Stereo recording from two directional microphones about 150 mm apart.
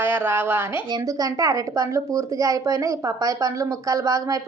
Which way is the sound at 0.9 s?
25° right (ahead or behind).